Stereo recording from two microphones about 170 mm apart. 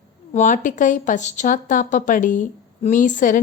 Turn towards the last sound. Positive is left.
turn(degrees=50)  # may be behind; listen again after turning